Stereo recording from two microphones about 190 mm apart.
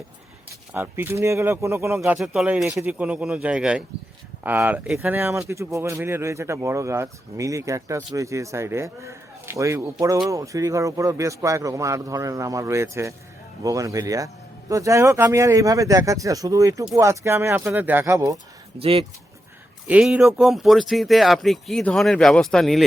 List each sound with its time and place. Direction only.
0.7 s speech: 10° right (ahead or behind)
2.1 s speech: centre (ahead or behind)
18.8 s speech: 30° right (ahead or behind)
19.9 s speech: 5° right (ahead or behind)